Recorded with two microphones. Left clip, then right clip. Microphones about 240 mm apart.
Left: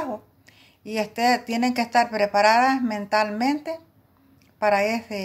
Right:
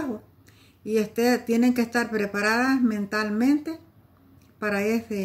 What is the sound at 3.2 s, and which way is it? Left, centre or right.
Speech, centre.